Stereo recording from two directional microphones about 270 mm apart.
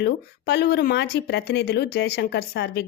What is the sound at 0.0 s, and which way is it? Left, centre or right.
Speech, left.